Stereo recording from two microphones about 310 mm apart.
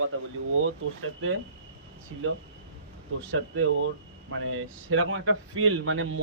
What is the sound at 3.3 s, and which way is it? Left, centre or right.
Speech, right.